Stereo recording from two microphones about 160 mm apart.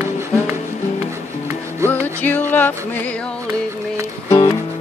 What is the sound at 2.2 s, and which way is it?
Music, 10° left (ahead or behind).